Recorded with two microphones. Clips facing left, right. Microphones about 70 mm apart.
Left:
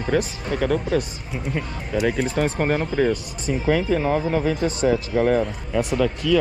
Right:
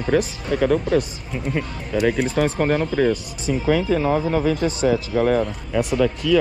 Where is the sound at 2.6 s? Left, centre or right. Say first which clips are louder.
Right 1 dB; right.